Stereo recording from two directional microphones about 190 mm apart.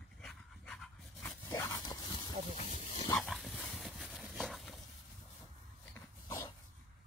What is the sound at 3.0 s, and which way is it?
Dog, 15° left (ahead or behind).